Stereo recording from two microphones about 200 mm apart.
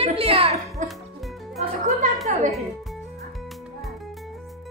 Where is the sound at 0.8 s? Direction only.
40° right (ahead or behind).